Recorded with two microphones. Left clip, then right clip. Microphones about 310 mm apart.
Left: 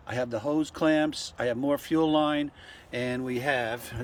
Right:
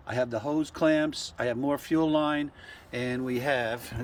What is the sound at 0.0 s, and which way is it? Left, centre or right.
Speech, centre.